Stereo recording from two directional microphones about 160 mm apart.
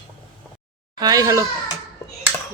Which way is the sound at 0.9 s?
25° right (ahead or behind).